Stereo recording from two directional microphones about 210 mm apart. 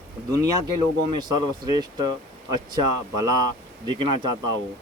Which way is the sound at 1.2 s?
20° right (ahead or behind).